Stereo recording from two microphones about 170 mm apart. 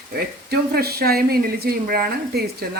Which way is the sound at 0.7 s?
65° right (ahead or behind).